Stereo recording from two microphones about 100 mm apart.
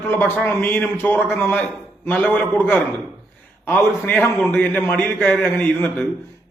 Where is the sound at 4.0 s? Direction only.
15° left (ahead or behind).